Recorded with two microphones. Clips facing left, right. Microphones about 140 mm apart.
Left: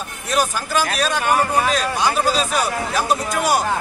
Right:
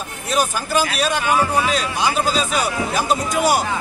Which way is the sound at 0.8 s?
50° left (ahead or behind).